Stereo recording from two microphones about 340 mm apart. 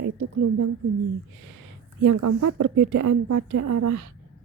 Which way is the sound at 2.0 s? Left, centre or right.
Right.